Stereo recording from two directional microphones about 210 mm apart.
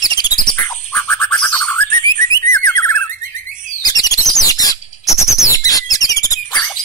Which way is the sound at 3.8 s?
20° left (ahead or behind).